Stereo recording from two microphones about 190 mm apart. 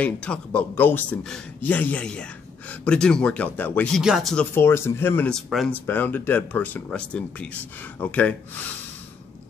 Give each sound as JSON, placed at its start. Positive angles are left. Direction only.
{"t": 0.0, "sound": "speech", "side_deg": 5}
{"t": 4.6, "sound": "speech", "side_deg": 15}